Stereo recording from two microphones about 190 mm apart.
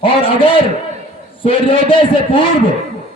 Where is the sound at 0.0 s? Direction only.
30° left (ahead or behind).